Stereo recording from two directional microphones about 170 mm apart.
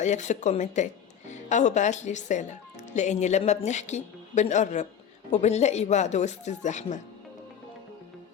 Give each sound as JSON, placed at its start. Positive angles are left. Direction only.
{"t": 0.0, "sound": "speech", "side_deg": 45}